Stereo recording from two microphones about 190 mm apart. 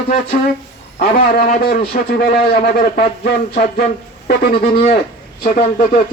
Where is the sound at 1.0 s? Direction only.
50° left (ahead or behind).